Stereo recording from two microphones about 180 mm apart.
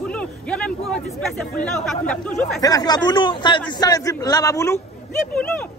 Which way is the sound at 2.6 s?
20° left (ahead or behind).